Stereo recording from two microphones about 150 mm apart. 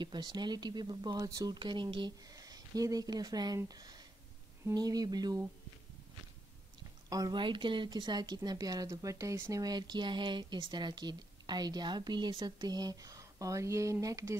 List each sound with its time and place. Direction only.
0.0 s speech: 30° right (ahead or behind)
7.1 s speech: 25° right (ahead or behind)